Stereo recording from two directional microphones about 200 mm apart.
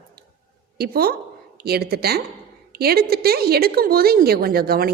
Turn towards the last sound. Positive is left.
turn(degrees=-50)  # may be behind; listen again after turning